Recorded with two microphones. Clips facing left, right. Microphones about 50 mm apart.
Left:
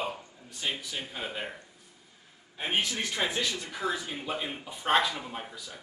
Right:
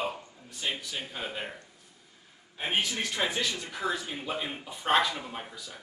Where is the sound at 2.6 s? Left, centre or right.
Centre.